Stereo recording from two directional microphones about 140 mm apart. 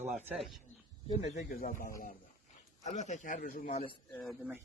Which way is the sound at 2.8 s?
55° left (ahead or behind).